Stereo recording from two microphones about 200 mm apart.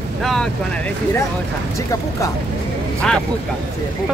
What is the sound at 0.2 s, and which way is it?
Speech, centre (ahead or behind).